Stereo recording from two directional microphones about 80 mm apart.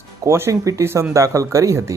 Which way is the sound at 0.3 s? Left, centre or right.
Right.